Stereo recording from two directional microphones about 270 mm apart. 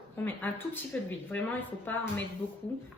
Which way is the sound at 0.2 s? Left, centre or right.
Centre.